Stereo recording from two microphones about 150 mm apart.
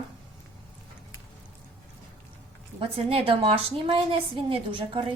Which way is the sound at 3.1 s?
40° right (ahead or behind).